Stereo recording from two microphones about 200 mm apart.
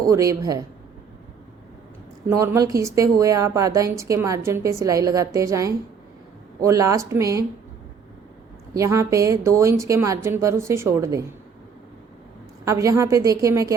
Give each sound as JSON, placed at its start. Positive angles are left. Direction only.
{"t": 0.0, "sound": "a woman's voice", "side_deg": -15}
{"t": 2.3, "sound": "a woman's voice", "side_deg": -15}
{"t": 8.7, "sound": "a woman's voice", "side_deg": -15}
{"t": 12.6, "sound": "a woman's voice", "side_deg": -15}